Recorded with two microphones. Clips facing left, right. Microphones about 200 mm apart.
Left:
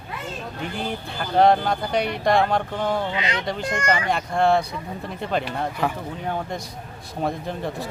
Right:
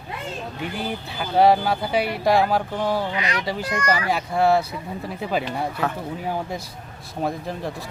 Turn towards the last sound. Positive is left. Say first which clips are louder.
# left 1 dB
turn(degrees=0)  # may be behind; listen again after turning